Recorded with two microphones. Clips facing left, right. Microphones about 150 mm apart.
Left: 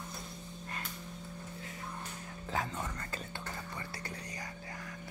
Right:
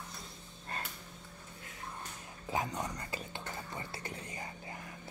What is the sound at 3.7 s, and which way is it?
Music, 20° right (ahead or behind).